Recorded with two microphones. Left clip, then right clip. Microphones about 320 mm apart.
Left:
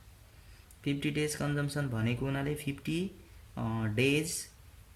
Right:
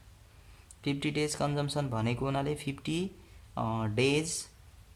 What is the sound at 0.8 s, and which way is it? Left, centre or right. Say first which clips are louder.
Speech: right 1 dB; centre.